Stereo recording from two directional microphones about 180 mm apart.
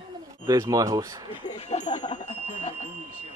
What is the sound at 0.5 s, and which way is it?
Speech, 20° right (ahead or behind).